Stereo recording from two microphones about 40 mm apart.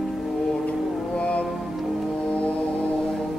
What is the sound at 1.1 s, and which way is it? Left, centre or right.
Music, left.